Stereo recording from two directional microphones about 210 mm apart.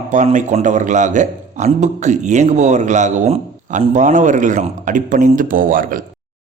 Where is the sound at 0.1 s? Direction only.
35° right (ahead or behind).